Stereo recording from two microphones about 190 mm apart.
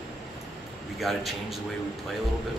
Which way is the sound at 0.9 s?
Centre (ahead or behind).